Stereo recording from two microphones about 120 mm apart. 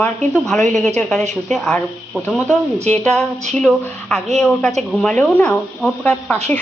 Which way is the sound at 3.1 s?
5° left (ahead or behind).